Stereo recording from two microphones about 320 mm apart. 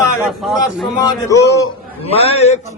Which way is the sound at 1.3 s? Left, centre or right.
Centre.